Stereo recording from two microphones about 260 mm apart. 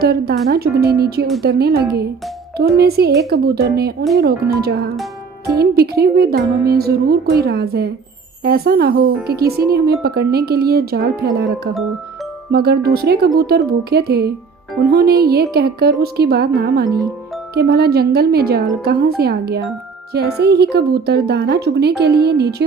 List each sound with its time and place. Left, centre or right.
0.0 s speech: right
16.8 s speech: centre
17.5 s speech: right